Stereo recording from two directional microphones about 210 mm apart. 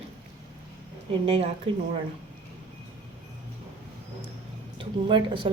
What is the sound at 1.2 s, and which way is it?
Speech, 25° right (ahead or behind).